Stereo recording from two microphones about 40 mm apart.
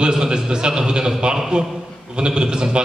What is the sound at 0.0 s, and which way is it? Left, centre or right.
A man's voice, centre.